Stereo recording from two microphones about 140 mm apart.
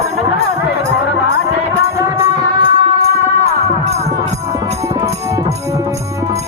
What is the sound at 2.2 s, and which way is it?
Music, 40° right (ahead or behind).